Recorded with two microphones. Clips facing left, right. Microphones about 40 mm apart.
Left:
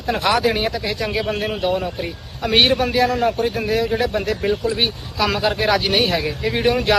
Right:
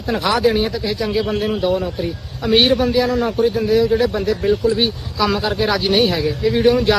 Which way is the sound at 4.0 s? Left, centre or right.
Left.